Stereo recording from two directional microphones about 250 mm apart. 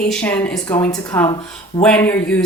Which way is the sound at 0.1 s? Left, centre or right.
Centre.